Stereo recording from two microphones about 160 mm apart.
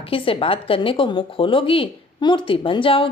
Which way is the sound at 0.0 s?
35° left (ahead or behind).